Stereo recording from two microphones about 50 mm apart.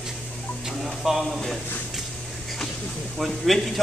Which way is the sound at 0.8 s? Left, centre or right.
Centre.